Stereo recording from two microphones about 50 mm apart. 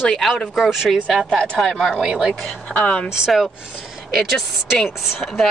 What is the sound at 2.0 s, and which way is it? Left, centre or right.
Speech, centre.